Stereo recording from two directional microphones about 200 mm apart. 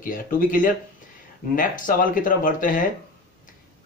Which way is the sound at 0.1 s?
40° left (ahead or behind).